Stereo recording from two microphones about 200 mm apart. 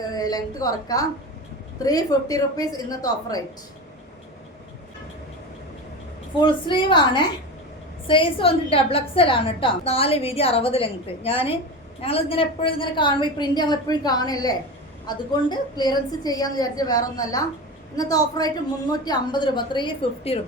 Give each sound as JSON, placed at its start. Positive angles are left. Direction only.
{"t": 0.0, "sound": "a woman's voice", "side_deg": 20}
{"t": 6.4, "sound": "a woman's voice", "side_deg": 25}